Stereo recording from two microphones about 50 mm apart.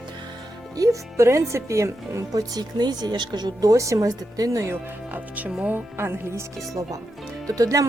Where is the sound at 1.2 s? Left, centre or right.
Right.